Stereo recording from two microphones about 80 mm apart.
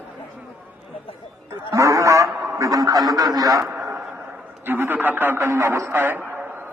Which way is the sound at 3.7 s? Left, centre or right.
Right.